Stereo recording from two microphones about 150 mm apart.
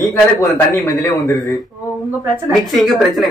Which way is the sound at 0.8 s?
20° left (ahead or behind).